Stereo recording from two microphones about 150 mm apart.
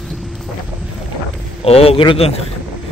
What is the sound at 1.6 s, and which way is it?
Speech, 40° left (ahead or behind).